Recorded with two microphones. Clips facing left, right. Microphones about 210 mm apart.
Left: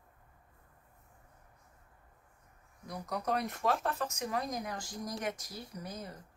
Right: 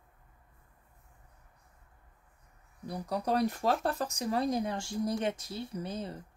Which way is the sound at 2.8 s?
30° right (ahead or behind).